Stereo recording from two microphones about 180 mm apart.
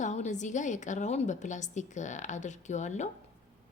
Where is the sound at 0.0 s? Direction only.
40° left (ahead or behind).